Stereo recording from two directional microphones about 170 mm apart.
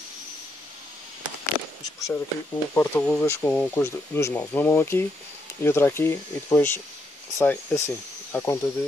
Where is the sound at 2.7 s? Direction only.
15° left (ahead or behind).